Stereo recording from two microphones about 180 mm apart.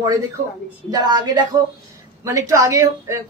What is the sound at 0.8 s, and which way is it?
A woman's voice, 25° right (ahead or behind).